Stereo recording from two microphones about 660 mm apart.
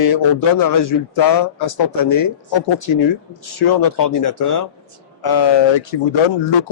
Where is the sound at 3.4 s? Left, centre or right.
Left.